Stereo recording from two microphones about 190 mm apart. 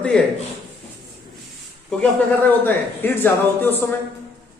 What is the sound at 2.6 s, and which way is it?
A man's voice, 10° left (ahead or behind).